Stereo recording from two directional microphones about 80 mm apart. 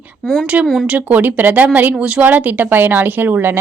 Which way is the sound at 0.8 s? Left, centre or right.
Centre.